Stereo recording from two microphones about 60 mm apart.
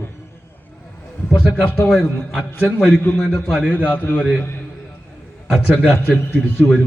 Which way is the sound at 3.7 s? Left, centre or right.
Left.